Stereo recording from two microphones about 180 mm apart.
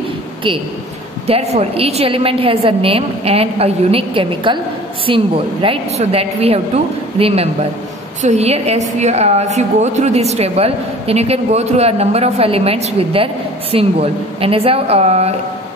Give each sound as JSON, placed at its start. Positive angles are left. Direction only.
{"t": 1.2, "sound": "a woman's voice", "side_deg": -35}